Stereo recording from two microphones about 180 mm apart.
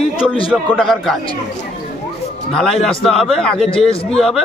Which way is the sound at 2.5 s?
5° left (ahead or behind).